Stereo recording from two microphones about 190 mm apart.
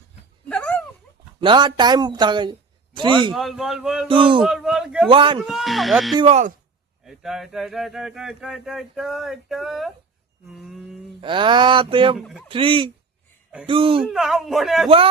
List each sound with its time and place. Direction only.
0.4 s a sound: 5° left (ahead or behind)
1.4 s a man's voice: 25° right (ahead or behind)
3.3 s speech: centre (ahead or behind)
4.1 s speech: 25° right (ahead or behind)
4.4 s speech: 5° right (ahead or behind)
5.0 s speech: 25° right (ahead or behind)
5.5 s speech: centre (ahead or behind)
6.1 s speech: 35° right (ahead or behind)
7.0 s speech: centre (ahead or behind)
10.5 s a sound: centre (ahead or behind)
11.2 s speech: 25° right (ahead or behind)
14.0 s speech: centre (ahead or behind)